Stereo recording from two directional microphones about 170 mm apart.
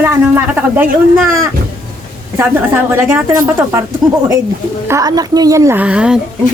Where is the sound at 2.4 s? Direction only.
10° right (ahead or behind).